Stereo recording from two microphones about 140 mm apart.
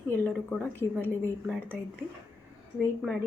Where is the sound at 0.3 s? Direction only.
10° left (ahead or behind).